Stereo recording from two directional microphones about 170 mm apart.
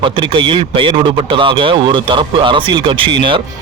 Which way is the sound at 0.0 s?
30° right (ahead or behind).